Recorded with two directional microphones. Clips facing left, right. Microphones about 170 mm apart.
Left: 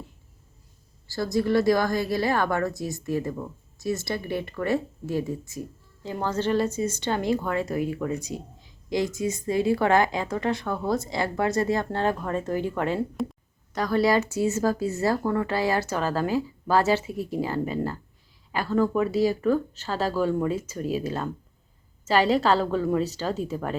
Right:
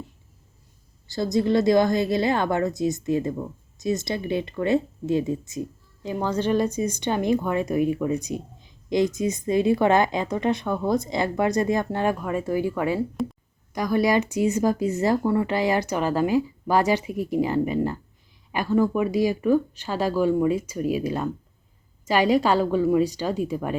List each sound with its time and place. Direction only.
1.0 s speech: 20° right (ahead or behind); by 13.3 s centre (ahead or behind)
13.7 s speech: 15° right (ahead or behind)